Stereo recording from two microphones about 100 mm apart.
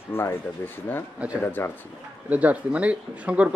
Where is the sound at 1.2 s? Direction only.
15° right (ahead or behind).